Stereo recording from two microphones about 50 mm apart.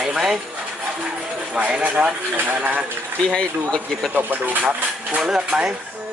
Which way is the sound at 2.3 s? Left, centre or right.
Right.